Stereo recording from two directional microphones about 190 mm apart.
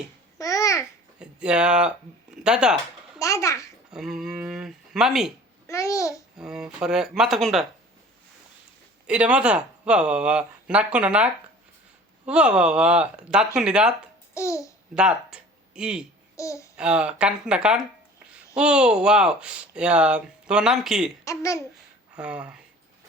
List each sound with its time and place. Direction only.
0.3 s babbling: 15° left (ahead or behind)
1.2 s speech: 5° right (ahead or behind)
3.2 s a child's voice: 15° left (ahead or behind)
3.9 s speech: centre (ahead or behind)
5.6 s a child's voice: 15° left (ahead or behind)
6.3 s speech: 5° right (ahead or behind)
9.0 s speech: 5° right (ahead or behind)
14.3 s speech: 15° left (ahead or behind)
14.9 s speech: 5° right (ahead or behind)
16.3 s babbling: 15° left (ahead or behind)
16.7 s speech: 5° right (ahead or behind)
21.2 s speech: 15° left (ahead or behind)
22.1 s speech: 5° right (ahead or behind)